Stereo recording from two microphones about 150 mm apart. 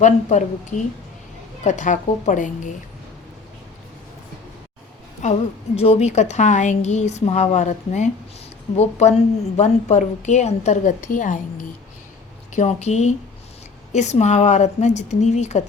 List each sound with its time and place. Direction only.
0.0 s a woman's voice: 55° left (ahead or behind)
1.6 s a woman's voice: 55° left (ahead or behind)
5.2 s a woman's voice: 45° left (ahead or behind)
12.5 s a woman's voice: 50° left (ahead or behind)